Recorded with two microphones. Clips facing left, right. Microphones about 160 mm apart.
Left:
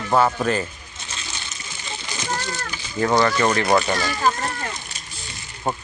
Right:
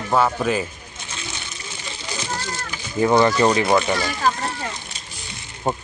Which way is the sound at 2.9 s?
20° right (ahead or behind).